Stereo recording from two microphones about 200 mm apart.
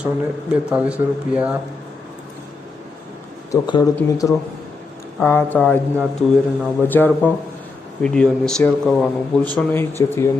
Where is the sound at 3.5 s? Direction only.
20° left (ahead or behind).